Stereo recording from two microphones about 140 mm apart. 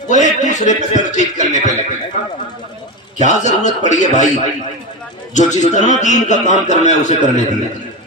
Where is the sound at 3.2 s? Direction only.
60° left (ahead or behind).